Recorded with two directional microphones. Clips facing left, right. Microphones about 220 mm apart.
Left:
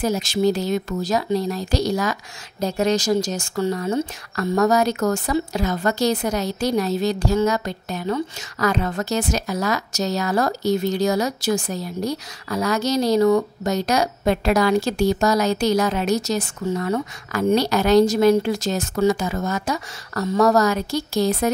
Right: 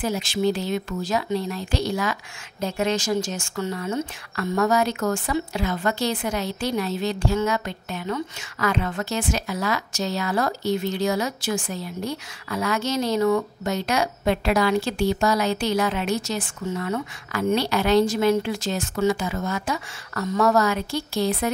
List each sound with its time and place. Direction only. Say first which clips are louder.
0.0 s speech: left 3 dB; 40° left (ahead or behind)